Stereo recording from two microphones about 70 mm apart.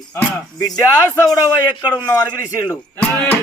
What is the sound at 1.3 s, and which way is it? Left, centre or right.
Speech, left.